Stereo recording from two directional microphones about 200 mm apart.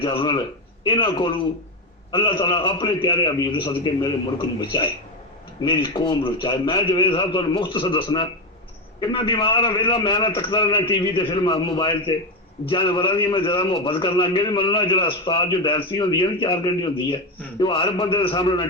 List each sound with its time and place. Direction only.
0.0 s a man's voice: 25° left (ahead or behind)